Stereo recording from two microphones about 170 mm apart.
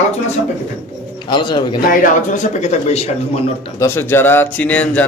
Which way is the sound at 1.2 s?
25° left (ahead or behind).